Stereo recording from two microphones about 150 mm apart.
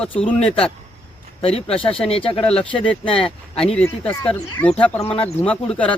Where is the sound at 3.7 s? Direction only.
10° left (ahead or behind).